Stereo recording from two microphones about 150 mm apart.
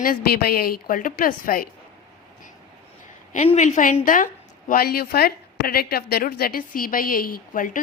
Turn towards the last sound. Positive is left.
turn(degrees=65)  # may be behind; listen again after turning